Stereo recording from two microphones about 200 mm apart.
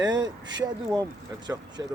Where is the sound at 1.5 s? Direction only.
10° right (ahead or behind).